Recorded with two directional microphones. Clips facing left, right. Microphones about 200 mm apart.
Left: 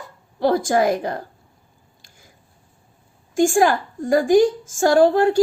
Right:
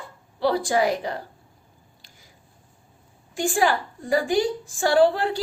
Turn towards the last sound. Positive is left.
turn(degrees=45)  # may be behind; listen again after turning